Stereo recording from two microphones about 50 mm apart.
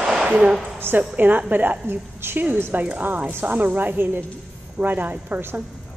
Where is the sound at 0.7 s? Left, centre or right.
Right.